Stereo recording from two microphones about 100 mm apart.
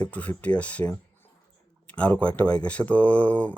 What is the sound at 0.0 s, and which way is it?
Speech, 15° left (ahead or behind).